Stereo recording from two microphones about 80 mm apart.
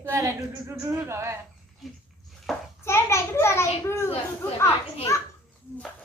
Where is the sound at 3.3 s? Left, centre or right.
Left.